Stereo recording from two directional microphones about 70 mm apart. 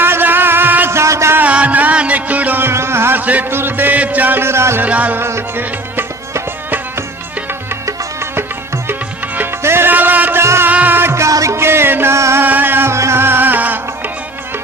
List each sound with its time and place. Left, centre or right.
0.0 s music: right
0.9 s music: right
1.4 s music: right
4.8 s music: right
5.2 s music: right
7.9 s music: right
10.4 s music: right
10.7 s music: right
12.4 s music: right